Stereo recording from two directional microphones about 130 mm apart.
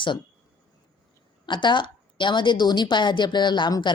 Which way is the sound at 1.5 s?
35° left (ahead or behind).